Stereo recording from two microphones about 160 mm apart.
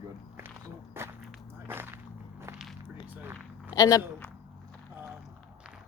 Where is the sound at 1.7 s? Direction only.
15° right (ahead or behind).